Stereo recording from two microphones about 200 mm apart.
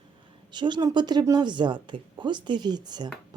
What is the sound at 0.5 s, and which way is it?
A woman's voice, 20° right (ahead or behind).